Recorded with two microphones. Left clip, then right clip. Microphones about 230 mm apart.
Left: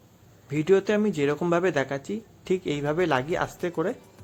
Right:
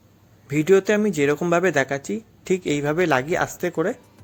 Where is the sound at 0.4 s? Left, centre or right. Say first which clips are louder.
Right 5 dB; centre.